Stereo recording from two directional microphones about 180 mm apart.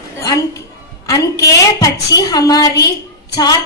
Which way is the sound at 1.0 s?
20° left (ahead or behind).